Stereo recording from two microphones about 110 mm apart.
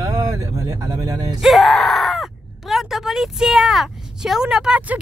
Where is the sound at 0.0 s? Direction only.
30° right (ahead or behind).